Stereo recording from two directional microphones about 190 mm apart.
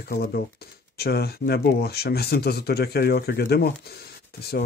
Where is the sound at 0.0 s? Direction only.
55° left (ahead or behind).